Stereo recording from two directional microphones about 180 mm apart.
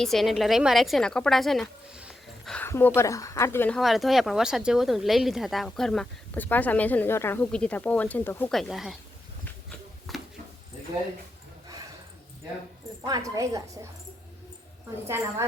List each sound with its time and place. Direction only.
0.0 s speech: centre (ahead or behind)
2.0 s dog: 5° right (ahead or behind)
2.6 s speech: 10° left (ahead or behind)
3.8 s speech: centre (ahead or behind)
8.5 s speech: centre (ahead or behind)
10.1 s a sound: centre (ahead or behind)
13.1 s a woman's voice: 20° right (ahead or behind)
15.0 s a woman's voice: 15° right (ahead or behind)